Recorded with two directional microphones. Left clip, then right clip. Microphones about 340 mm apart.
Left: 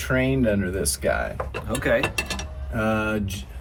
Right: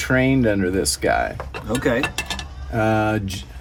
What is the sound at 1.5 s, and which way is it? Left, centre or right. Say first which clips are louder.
Speech: right 1 dB; centre.